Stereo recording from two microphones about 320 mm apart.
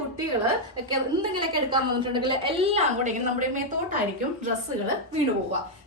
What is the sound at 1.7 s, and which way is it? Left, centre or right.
A woman's voice, centre.